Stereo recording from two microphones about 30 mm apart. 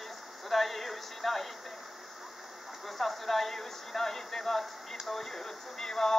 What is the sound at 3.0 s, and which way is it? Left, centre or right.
Speech, centre.